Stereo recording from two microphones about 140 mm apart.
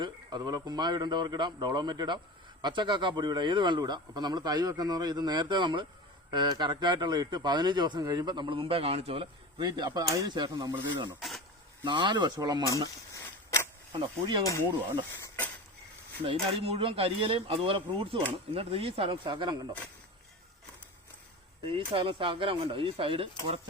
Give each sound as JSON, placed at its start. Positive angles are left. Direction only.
{"t": 0.0, "sound": "speech", "side_deg": -30}
{"t": 11.2, "sound": "speech", "side_deg": 0}
{"t": 11.9, "sound": "speech", "side_deg": -35}
{"t": 13.1, "sound": "a sound", "side_deg": 20}
{"t": 13.9, "sound": "speech", "side_deg": -35}
{"t": 14.4, "sound": "speech", "side_deg": 20}
{"t": 15.1, "sound": "a sound", "side_deg": 15}
{"t": 16.2, "sound": "speech", "side_deg": -45}
{"t": 21.6, "sound": "speech", "side_deg": -40}